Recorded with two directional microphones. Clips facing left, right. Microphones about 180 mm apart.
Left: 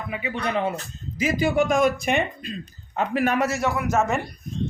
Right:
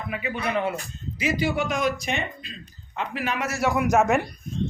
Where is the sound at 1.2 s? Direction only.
45° left (ahead or behind).